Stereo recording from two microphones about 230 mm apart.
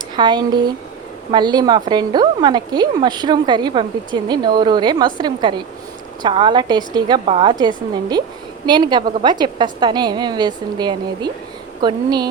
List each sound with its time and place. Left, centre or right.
0.2 s a woman's voice: centre